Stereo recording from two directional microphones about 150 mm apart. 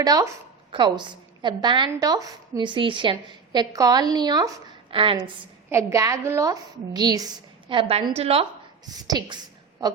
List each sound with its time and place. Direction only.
0.0 s a woman's voice: 25° right (ahead or behind)
4.9 s a woman's voice: 35° right (ahead or behind)
5.7 s a woman's voice: 20° right (ahead or behind); by 8.4 s 40° right (ahead or behind)
9.0 s a woman's voice: 25° right (ahead or behind)